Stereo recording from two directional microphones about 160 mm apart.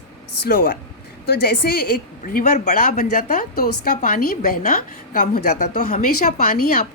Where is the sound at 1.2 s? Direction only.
75° left (ahead or behind).